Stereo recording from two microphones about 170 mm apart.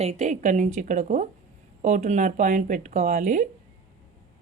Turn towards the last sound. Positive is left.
turn(degrees=-50)  # may be behind; listen again after turning